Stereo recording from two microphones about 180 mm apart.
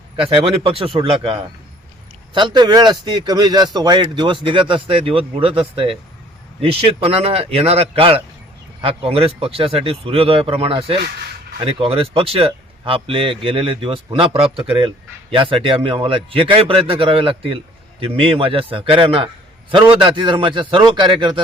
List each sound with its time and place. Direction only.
0.2 s a man's voice: 30° right (ahead or behind)